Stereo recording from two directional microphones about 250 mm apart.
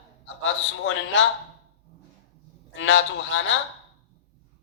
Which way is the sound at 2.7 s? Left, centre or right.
Left.